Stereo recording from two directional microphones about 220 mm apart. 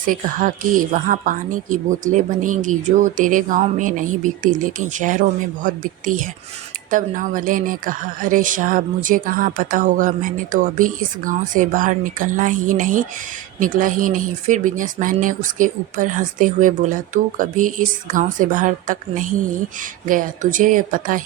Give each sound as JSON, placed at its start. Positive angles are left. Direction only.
{"t": 0.0, "sound": "speech", "side_deg": -40}